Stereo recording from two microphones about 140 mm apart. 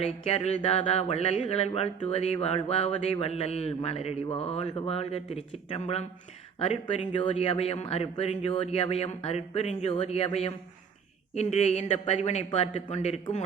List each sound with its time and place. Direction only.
0.0 s speech: 50° left (ahead or behind)
7.3 s speech: 45° left (ahead or behind)